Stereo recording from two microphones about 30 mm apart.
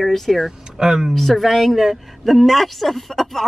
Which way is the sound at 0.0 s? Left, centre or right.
Centre.